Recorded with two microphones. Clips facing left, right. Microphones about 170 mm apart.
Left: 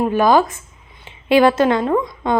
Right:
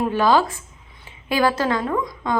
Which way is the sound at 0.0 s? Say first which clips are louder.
Left 4 dB; 15° left (ahead or behind).